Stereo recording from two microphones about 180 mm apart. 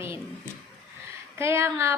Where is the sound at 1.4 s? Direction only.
15° right (ahead or behind).